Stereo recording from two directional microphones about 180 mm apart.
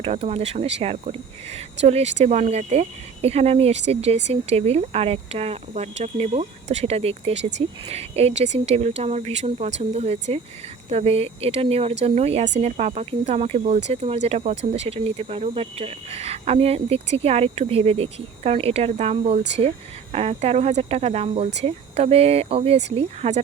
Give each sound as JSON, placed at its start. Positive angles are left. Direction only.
{"t": 0.0, "sound": "speech", "side_deg": -35}